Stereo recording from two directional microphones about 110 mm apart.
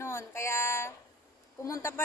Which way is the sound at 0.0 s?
25° left (ahead or behind).